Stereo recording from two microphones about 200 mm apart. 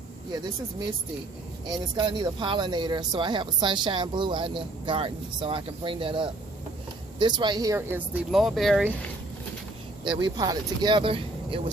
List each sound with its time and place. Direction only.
1.6 s speech: 20° right (ahead or behind); by 9.0 s centre (ahead or behind)
10.0 s speech: 25° right (ahead or behind)